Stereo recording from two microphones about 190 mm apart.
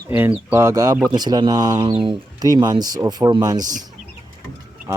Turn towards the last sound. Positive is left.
turn(degrees=-20)  # may be behind; listen again after turning